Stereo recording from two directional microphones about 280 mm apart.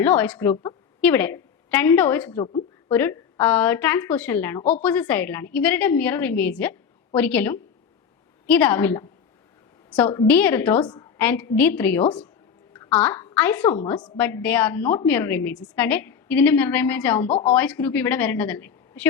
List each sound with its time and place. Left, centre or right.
0.0 s a woman's voice: centre